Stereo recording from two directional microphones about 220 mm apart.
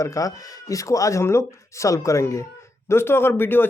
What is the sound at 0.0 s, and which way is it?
A man's voice, 15° left (ahead or behind).